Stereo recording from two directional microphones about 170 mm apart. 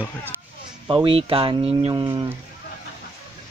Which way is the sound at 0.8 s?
30° right (ahead or behind).